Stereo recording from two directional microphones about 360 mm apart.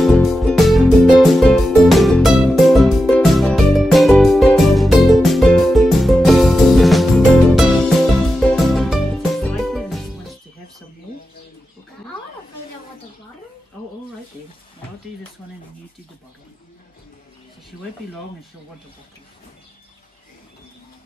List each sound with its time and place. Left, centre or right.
0.0 s music: centre